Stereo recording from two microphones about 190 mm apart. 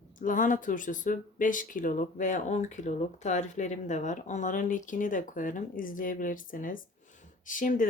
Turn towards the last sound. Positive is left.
turn(degrees=45)  # may be behind; listen again after turning